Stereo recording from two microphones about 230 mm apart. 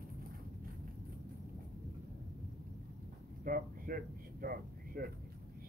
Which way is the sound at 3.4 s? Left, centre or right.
Right.